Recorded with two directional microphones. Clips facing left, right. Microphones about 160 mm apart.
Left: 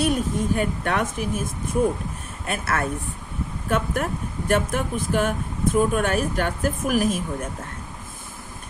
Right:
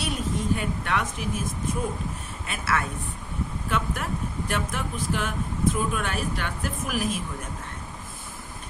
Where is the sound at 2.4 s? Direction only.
50° left (ahead or behind).